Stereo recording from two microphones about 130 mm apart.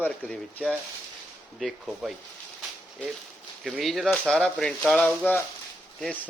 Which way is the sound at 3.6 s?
Centre (ahead or behind).